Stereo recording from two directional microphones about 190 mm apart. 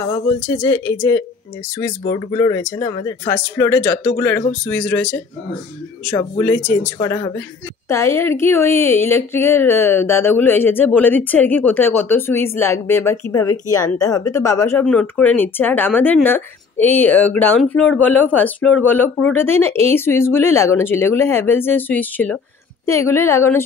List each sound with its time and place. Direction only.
0.1 s speech: 15° left (ahead or behind)